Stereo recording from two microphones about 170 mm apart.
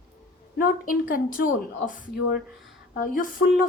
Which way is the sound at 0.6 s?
55° left (ahead or behind).